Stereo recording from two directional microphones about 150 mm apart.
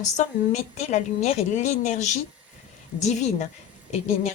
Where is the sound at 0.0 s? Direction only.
50° left (ahead or behind).